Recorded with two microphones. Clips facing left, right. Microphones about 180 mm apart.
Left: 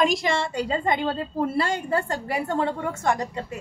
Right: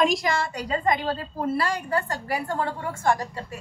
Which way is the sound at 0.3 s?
25° left (ahead or behind).